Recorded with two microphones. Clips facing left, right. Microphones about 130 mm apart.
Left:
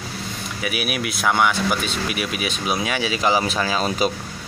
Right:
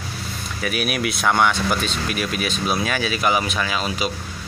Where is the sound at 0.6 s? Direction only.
10° left (ahead or behind).